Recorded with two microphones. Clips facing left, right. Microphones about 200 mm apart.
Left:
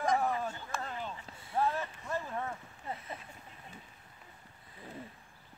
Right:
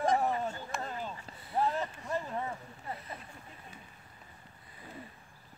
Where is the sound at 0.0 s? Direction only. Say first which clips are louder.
Right 2 dB; 25° right (ahead or behind).